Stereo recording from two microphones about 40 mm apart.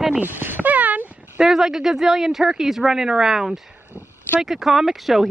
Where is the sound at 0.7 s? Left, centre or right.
Right.